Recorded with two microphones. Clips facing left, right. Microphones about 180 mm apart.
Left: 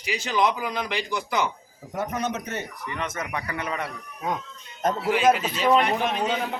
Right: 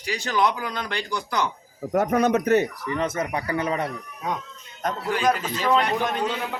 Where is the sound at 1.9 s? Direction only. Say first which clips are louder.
Right 8 dB; 70° right (ahead or behind).